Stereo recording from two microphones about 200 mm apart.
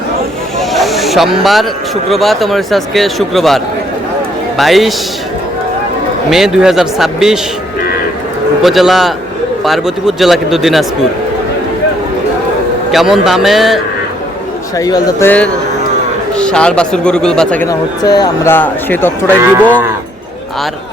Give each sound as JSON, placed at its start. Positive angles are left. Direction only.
{"t": 0.7, "sound": "a sound", "side_deg": 0}
{"t": 2.0, "sound": "a man's voice", "side_deg": 0}
{"t": 6.3, "sound": "a man's voice", "side_deg": -5}
{"t": 8.6, "sound": "a man's voice", "side_deg": 0}
{"t": 12.9, "sound": "a man's voice", "side_deg": 0}
{"t": 14.8, "sound": "a man's voice", "side_deg": 20}
{"t": 17.7, "sound": "speech", "side_deg": 20}